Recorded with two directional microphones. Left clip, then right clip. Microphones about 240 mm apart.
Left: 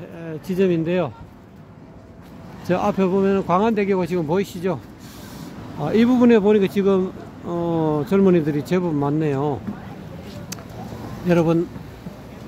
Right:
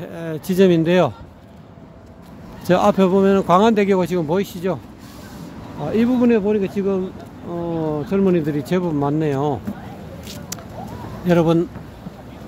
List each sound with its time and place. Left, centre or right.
0.1 s speech: centre
2.7 s speech: centre
5.9 s speech: centre
11.2 s speech: centre